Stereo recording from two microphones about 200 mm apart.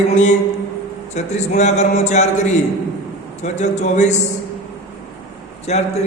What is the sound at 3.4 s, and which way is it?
Speech, 35° left (ahead or behind).